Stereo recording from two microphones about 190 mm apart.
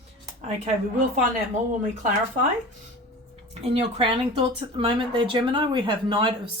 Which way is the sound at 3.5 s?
30° right (ahead or behind).